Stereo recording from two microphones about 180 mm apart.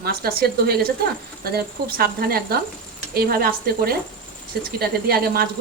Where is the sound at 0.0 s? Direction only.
60° right (ahead or behind).